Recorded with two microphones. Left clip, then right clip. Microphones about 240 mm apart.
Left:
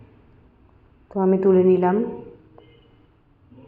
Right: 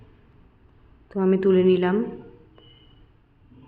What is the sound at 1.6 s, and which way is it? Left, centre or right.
Speech, centre.